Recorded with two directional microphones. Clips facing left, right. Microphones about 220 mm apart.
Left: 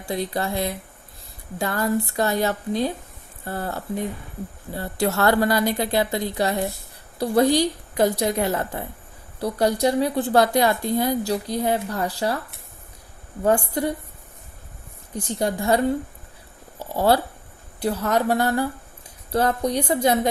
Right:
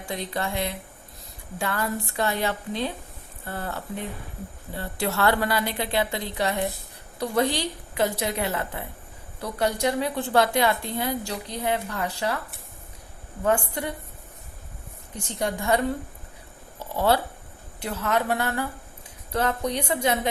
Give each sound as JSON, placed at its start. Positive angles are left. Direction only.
{"t": 0.0, "sound": "a woman's voice", "side_deg": 35}
{"t": 13.4, "sound": "a woman's voice", "side_deg": 35}
{"t": 15.4, "sound": "a woman's voice", "side_deg": 35}
{"t": 17.7, "sound": "a woman's voice", "side_deg": 40}